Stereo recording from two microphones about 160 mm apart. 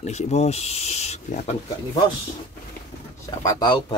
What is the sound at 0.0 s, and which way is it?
Speech, 45° left (ahead or behind).